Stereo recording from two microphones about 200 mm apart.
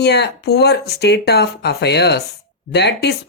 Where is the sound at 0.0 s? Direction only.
55° left (ahead or behind).